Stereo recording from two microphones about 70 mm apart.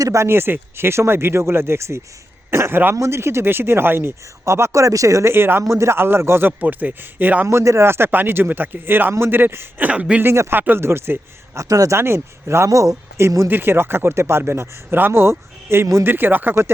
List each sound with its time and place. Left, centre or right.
0.0 s speech: right
6.6 s a man's voice: right
7.4 s a man's voice: right; by 10.2 s centre
10.2 s speech: right
11.9 s a man's voice: right